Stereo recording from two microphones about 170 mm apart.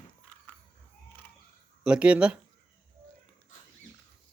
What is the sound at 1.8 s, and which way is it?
Speech, 5° right (ahead or behind).